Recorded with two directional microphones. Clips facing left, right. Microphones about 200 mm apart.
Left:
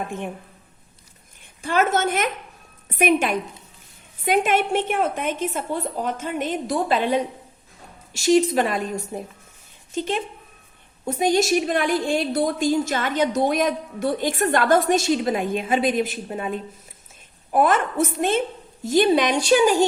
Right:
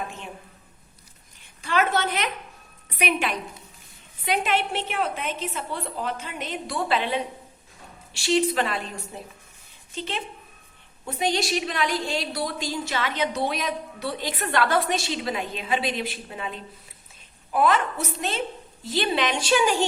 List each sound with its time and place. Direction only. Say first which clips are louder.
1.6 s a woman's voice: left 3 dB; 45° left (ahead or behind)